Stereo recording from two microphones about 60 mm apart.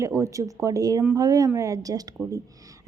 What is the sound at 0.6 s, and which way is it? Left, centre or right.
Speech, right.